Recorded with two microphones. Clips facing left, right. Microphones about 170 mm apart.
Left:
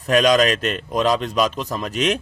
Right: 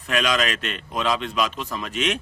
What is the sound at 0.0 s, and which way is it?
A man's voice, 40° left (ahead or behind).